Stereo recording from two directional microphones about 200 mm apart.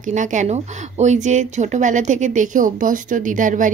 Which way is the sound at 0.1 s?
40° right (ahead or behind).